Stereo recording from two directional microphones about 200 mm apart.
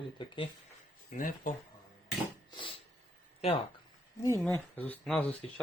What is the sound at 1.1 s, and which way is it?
Speech, 40° left (ahead or behind).